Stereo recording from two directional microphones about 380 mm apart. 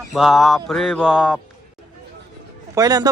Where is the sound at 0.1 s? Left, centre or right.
Centre.